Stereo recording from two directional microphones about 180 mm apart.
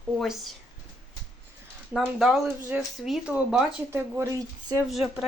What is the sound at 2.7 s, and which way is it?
Speech, 10° right (ahead or behind).